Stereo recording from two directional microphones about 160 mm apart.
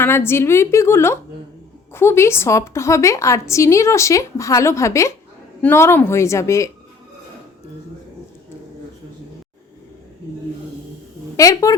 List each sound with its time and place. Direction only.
0.0 s a woman's voice: 15° left (ahead or behind)
11.3 s speech: 20° left (ahead or behind)